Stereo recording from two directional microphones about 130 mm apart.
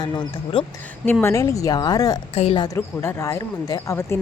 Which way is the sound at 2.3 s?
50° left (ahead or behind).